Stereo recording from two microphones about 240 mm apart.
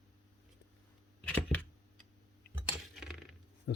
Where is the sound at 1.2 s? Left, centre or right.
Centre.